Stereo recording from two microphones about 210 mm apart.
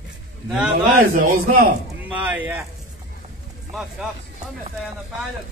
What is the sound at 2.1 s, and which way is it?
Speech, 10° right (ahead or behind).